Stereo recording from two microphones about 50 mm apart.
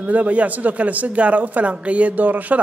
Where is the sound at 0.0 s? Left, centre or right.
Right.